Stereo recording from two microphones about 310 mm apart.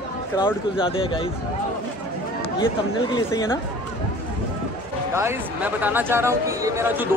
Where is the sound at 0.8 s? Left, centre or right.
Centre.